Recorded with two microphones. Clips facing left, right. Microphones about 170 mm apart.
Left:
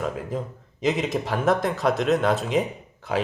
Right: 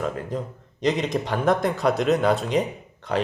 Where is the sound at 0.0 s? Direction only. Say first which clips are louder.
Right 1 dB; 5° left (ahead or behind).